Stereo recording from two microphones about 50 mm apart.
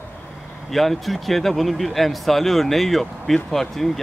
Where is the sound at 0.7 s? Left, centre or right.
Centre.